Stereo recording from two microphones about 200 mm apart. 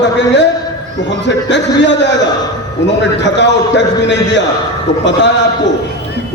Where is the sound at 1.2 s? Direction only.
60° left (ahead or behind).